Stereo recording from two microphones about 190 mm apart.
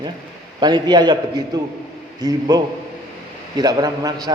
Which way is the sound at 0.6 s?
20° right (ahead or behind).